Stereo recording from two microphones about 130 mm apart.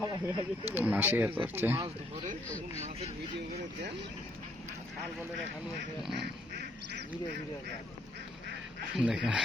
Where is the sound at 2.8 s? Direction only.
55° right (ahead or behind).